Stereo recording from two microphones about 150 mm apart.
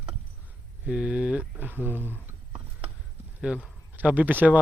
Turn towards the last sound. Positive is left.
turn(degrees=-10)  # may be behind; listen again after turning